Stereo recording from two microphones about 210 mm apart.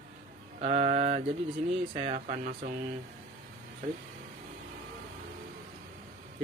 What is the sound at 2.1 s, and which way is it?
Speech, 40° right (ahead or behind).